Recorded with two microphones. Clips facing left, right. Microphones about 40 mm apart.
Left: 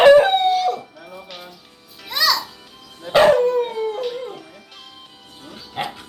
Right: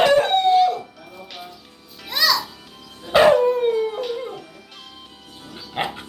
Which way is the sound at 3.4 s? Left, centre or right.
Centre.